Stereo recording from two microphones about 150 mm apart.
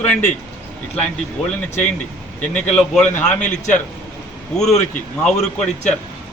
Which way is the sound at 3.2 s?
55° left (ahead or behind).